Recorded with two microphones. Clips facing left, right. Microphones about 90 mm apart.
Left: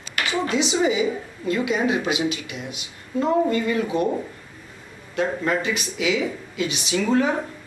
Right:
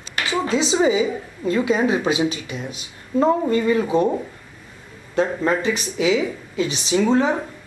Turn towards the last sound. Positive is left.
turn(degrees=-25)  # may be behind; listen again after turning